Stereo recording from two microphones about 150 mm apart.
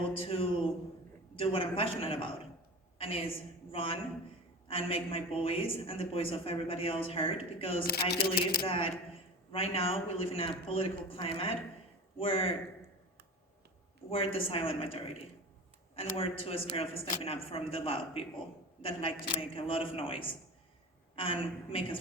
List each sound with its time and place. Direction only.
0.2 s a man's voice: 40° left (ahead or behind)
7.9 s speech: 90° left
8.6 s a man's voice: 40° left (ahead or behind)
14.1 s a man's voice: 40° left (ahead or behind)
21.2 s a man's voice: 35° left (ahead or behind)